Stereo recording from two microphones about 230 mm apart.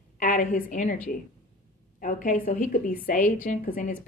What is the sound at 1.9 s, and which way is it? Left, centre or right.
A woman's voice, left.